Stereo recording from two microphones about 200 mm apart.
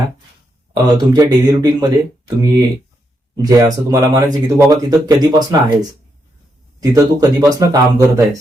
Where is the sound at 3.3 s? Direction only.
15° right (ahead or behind).